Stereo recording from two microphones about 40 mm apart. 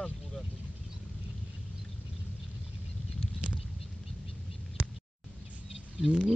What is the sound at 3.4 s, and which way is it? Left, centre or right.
Bird flight, right.